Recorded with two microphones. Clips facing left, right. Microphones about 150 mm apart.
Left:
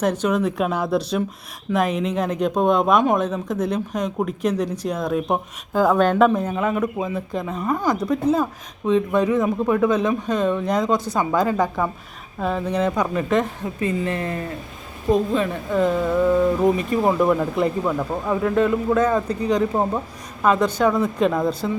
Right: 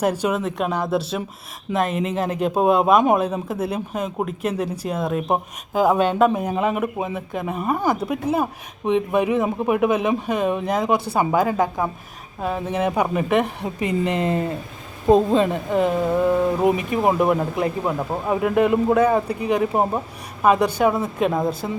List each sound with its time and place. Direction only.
0.0 s speech: 5° right (ahead or behind)
6.6 s speech: 20° right (ahead or behind)
21.3 s speech: 20° right (ahead or behind)